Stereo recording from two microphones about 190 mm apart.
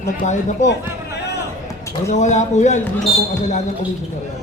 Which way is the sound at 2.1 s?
40° left (ahead or behind).